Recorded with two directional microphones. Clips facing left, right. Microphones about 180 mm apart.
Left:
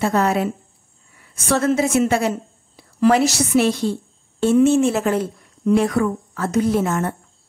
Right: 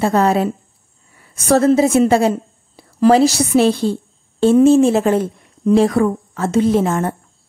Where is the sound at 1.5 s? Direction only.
35° right (ahead or behind).